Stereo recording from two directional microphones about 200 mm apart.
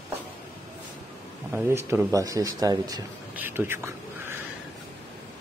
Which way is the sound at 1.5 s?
10° right (ahead or behind).